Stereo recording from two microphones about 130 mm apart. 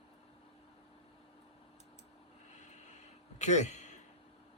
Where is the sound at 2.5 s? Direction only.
65° left (ahead or behind).